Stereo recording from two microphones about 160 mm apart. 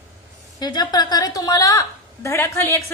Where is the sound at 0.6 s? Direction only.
25° left (ahead or behind).